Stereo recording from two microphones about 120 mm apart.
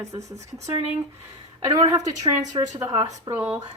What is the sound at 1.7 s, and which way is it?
A woman's voice, 35° right (ahead or behind).